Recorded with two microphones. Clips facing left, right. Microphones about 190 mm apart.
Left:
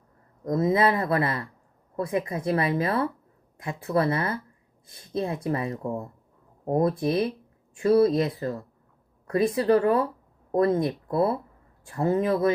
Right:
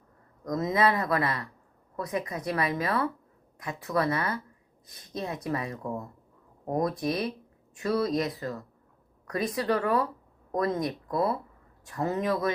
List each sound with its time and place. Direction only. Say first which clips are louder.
0.4 s speech: left 3 dB; 30° left (ahead or behind)